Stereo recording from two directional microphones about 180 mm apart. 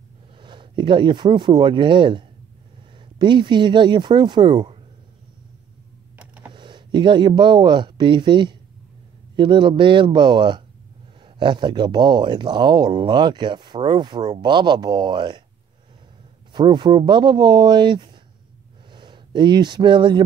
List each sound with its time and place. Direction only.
0.4 s speech: 25° right (ahead or behind)
6.1 s computer keyboard: 10° right (ahead or behind)
6.5 s speech: 25° right (ahead or behind)
16.5 s speech: 25° right (ahead or behind)